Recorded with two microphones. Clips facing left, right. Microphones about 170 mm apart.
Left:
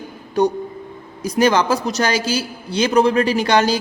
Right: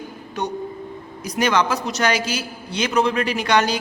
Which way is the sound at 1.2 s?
30° left (ahead or behind).